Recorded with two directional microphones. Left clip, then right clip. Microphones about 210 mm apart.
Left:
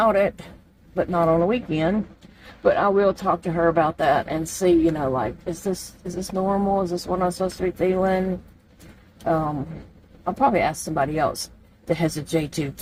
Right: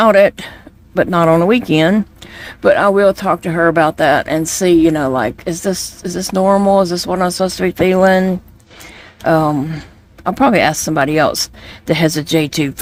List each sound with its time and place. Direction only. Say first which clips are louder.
0.0 s speech: right 10 dB; 50° right (ahead or behind)
10.2 s speech: right 8 dB; 50° right (ahead or behind)